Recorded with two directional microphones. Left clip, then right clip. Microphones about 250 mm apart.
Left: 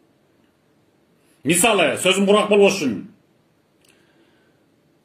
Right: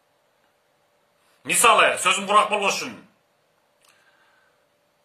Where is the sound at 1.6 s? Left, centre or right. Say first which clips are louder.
Right 1 dB; right.